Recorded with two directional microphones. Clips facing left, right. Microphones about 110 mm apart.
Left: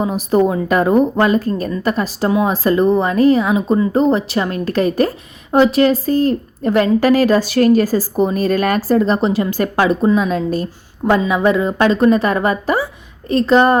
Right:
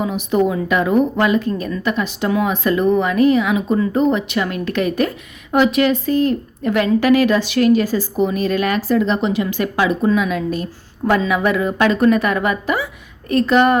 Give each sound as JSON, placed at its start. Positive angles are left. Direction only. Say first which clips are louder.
{"t": 0.0, "sound": "a woman's voice", "louder": "left 3 dB", "side_deg": 40}